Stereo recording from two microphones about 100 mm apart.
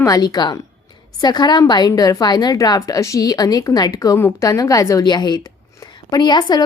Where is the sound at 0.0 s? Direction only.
40° left (ahead or behind).